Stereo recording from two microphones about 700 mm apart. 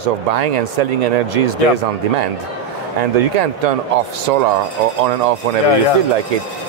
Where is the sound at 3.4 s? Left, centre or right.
Right.